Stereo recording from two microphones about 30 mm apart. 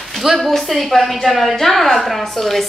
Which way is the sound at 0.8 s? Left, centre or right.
Centre.